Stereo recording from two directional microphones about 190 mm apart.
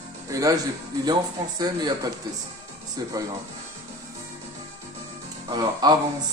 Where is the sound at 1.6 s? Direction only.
20° right (ahead or behind).